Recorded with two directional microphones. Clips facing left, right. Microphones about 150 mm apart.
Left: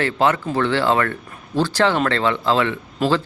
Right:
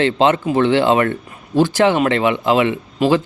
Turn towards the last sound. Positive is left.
turn(degrees=-15)  # may be behind; listen again after turning